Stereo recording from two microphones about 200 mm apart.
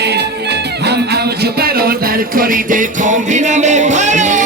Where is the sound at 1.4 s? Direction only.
50° right (ahead or behind).